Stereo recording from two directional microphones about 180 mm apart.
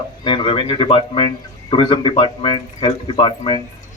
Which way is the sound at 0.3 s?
25° left (ahead or behind).